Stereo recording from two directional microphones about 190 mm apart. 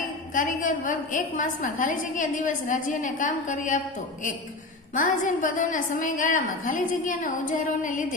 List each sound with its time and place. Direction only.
0.3 s a woman's voice: 45° left (ahead or behind)
4.9 s a woman's voice: 45° left (ahead or behind)